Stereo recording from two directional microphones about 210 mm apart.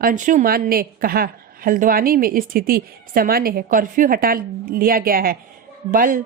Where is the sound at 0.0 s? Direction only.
40° right (ahead or behind).